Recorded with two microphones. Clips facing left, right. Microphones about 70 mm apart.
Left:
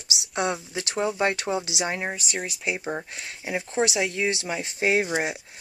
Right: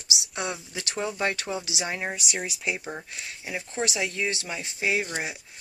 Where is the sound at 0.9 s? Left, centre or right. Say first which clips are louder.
Left 4 dB; centre.